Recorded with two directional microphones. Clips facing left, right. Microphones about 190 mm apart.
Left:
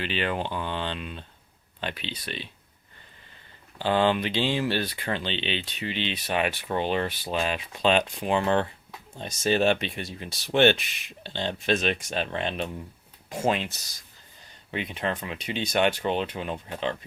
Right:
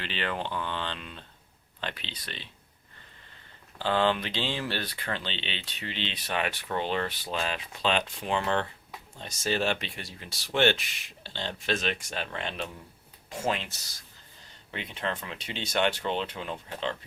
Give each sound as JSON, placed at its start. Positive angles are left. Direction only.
{"t": 0.0, "sound": "speech", "side_deg": 15}
{"t": 3.8, "sound": "speech", "side_deg": 10}
{"t": 14.7, "sound": "speech", "side_deg": 15}